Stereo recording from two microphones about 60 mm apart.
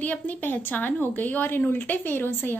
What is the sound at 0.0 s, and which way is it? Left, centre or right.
A woman's voice, left.